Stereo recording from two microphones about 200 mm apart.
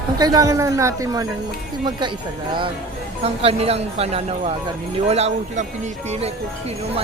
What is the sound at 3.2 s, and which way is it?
Speech, 30° right (ahead or behind).